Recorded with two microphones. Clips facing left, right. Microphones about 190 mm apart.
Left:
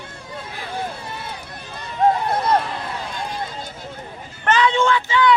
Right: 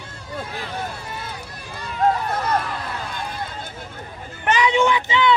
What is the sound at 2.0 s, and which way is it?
Run, 30° left (ahead or behind).